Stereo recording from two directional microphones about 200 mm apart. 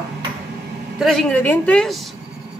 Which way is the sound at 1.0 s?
Centre (ahead or behind).